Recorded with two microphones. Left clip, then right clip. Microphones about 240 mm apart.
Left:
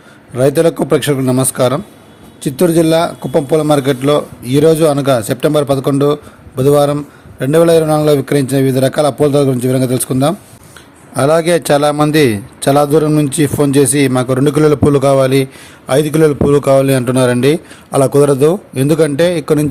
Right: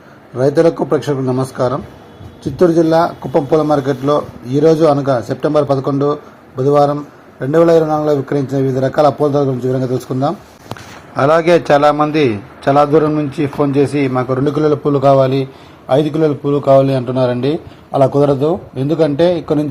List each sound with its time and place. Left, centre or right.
0.3 s a man's voice: left
15.9 s speech: left
16.1 s a man's voice: left
16.6 s speech: left
16.8 s a man's voice: left
17.5 s speech: left
19.0 s a man's voice: left